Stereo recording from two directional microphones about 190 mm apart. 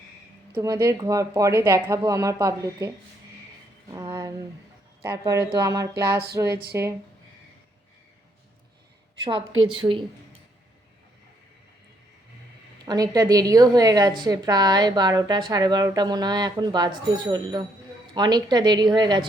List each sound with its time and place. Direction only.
0.5 s speech: 15° right (ahead or behind)
3.9 s a sound: 20° right (ahead or behind)
5.0 s speech: 15° right (ahead or behind)
9.5 s a woman's voice: 90° right
12.8 s a woman's voice: 20° right (ahead or behind)